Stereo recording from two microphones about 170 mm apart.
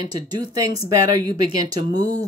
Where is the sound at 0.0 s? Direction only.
25° right (ahead or behind).